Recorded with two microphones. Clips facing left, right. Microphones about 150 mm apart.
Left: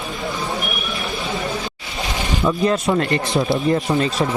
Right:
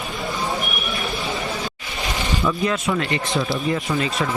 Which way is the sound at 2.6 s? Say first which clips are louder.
Left 4 dB; 40° left (ahead or behind).